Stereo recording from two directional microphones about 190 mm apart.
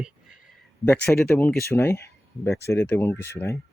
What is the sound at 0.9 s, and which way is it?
Speech, 5° left (ahead or behind).